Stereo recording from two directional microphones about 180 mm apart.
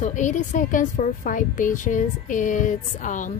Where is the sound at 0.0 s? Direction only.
45° left (ahead or behind).